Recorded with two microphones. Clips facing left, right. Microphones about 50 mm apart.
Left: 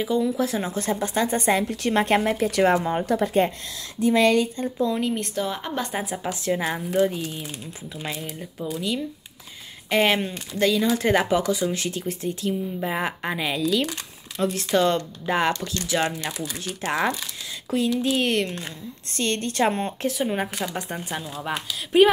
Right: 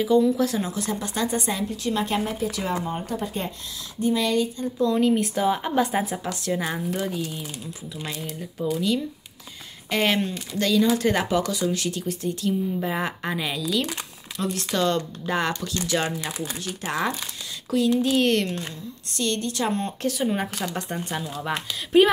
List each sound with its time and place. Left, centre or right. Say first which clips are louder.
0.0 s a woman's voice: right 3 dB; centre; by 1.6 s left
1.7 s speech: left 4 dB; left
4.0 s speech: left 4 dB; left
4.7 s a woman's voice: right 4 dB; centre
6.2 s a woman's voice: left 2 dB; centre
14.3 s a woman's voice: left 4 dB; left
15.9 s a woman's voice: left 2 dB; centre
17.7 s a woman's voice: right 1 dB; left
18.0 s speech: right 1 dB; centre
19.1 s a woman's voice: left 2 dB; left
19.8 s speech: even; centre